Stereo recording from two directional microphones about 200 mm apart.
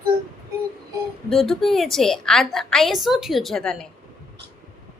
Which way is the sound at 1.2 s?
Centre (ahead or behind).